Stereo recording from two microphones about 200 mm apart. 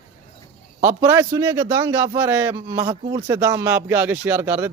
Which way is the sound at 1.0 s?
10° right (ahead or behind).